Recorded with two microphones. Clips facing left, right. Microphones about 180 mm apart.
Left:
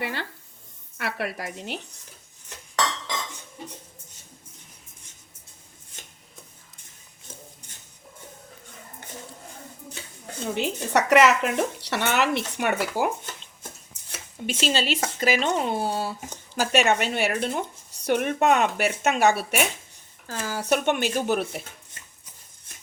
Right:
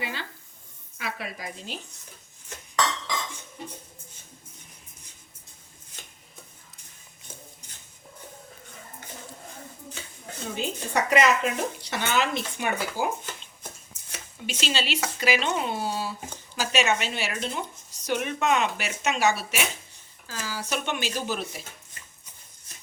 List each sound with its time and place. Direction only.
0.0 s a sound: 60° left (ahead or behind)
0.9 s speech: 70° left (ahead or behind)
10.5 s speech: 70° left (ahead or behind)
14.4 s speech: 45° left (ahead or behind)